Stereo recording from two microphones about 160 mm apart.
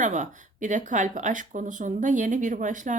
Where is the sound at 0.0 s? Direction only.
50° right (ahead or behind).